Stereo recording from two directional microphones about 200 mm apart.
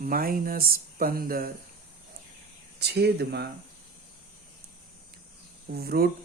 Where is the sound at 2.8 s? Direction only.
55° right (ahead or behind).